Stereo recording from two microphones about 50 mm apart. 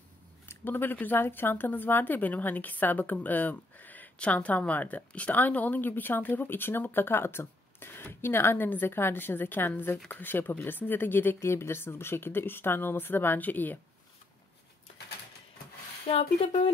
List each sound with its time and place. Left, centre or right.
0.7 s a woman's voice: left
11.4 s speech: left